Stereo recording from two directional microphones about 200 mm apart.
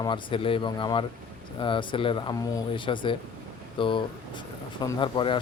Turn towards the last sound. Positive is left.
turn(degrees=25)  # may be behind; listen again after turning